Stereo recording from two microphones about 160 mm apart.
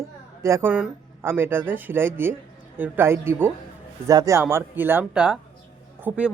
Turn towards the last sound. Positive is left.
turn(degrees=-10)  # may be behind; listen again after turning